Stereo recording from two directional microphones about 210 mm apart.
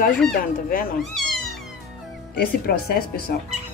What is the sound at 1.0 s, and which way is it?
Cat, centre (ahead or behind).